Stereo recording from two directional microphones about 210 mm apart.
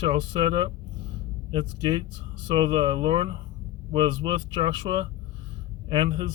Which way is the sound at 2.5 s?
25° right (ahead or behind).